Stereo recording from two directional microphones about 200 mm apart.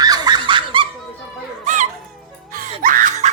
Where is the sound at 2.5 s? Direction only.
45° right (ahead or behind).